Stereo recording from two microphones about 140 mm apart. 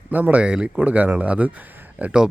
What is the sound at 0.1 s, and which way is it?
Speech, 10° right (ahead or behind).